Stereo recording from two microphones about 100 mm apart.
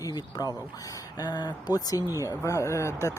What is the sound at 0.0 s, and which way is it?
Speech, 40° left (ahead or behind).